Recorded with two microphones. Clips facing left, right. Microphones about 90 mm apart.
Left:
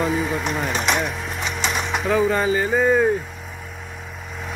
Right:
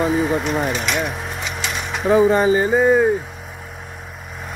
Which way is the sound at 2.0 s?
20° right (ahead or behind).